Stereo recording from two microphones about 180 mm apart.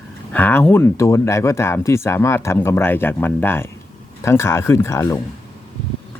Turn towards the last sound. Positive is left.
turn(degrees=15)  # may be behind; listen again after turning